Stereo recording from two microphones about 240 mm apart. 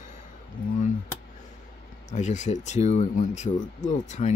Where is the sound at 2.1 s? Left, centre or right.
Left.